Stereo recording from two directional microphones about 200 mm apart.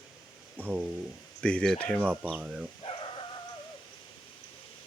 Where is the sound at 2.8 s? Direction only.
25° left (ahead or behind).